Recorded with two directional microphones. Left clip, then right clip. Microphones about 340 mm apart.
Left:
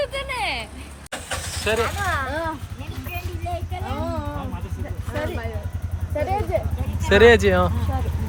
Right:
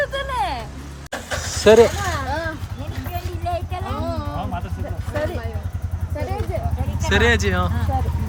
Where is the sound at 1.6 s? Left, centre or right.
Centre.